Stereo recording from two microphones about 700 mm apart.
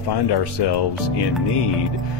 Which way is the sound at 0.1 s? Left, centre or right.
Left.